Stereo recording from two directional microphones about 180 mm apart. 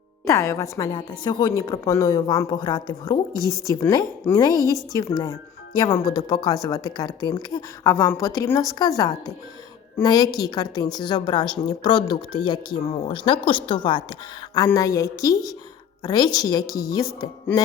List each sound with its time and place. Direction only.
0.3 s a woman's voice: 15° left (ahead or behind)